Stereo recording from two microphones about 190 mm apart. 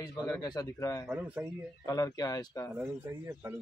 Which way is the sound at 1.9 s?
20° left (ahead or behind).